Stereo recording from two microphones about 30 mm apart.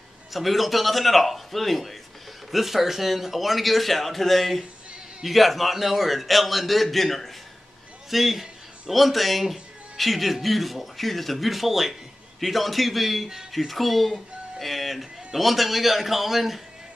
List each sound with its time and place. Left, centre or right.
0.3 s a man's voice: centre
2.5 s a man's voice: centre
8.1 s a man's voice: centre